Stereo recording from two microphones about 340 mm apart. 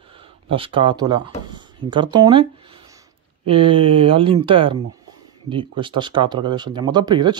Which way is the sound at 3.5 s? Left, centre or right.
Centre.